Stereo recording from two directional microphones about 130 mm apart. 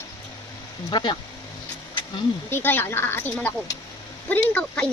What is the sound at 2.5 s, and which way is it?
Speech, 15° left (ahead or behind).